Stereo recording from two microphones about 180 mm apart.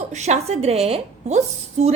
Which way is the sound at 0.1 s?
40° right (ahead or behind).